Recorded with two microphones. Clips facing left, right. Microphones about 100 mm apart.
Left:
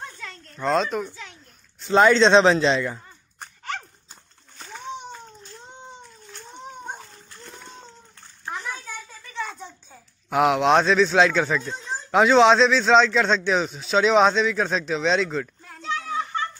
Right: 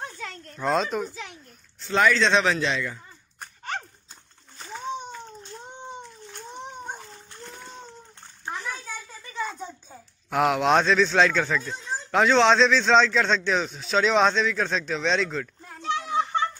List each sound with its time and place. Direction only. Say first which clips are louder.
0.6 s a child's voice: left 2 dB; 5° right (ahead or behind)
1.9 s a man's voice: left 5 dB; 25° left (ahead or behind)
4.6 s a sound: right 3 dB; 5° right (ahead or behind)
9.3 s a child's voice: right 1 dB; 5° right (ahead or behind)